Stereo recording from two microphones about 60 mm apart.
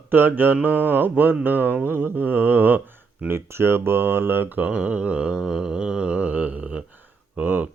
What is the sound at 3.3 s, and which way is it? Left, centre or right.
Speech, right.